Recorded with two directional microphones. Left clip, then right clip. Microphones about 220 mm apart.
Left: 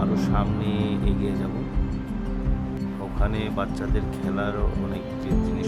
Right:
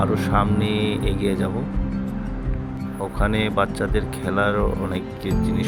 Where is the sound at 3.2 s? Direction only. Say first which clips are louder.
Right 8 dB; 20° right (ahead or behind).